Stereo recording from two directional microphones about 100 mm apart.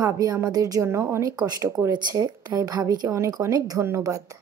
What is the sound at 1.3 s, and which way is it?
A woman's voice, 45° right (ahead or behind).